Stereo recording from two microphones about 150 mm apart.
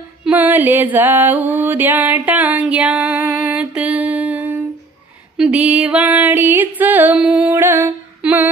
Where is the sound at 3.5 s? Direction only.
5° right (ahead or behind).